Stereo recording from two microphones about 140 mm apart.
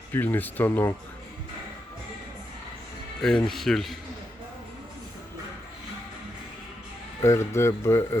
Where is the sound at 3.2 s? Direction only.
5° left (ahead or behind).